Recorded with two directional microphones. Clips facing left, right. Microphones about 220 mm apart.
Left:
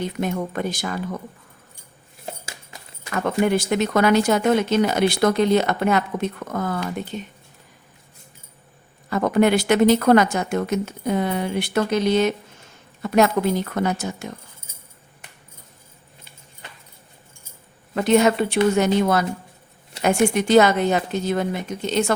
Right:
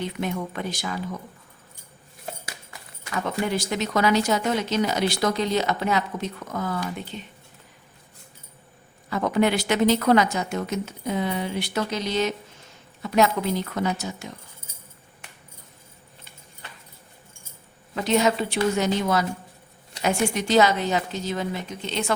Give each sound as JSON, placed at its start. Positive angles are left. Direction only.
{"t": 0.0, "sound": "speech", "side_deg": 45}
{"t": 3.1, "sound": "speech", "side_deg": 55}
{"t": 9.0, "sound": "speech", "side_deg": 50}
{"t": 17.9, "sound": "speech", "side_deg": 55}